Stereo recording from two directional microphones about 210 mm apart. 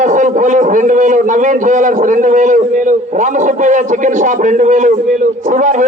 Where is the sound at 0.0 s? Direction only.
35° right (ahead or behind).